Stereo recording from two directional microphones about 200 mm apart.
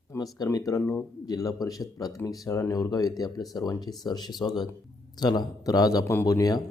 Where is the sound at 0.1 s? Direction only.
15° left (ahead or behind).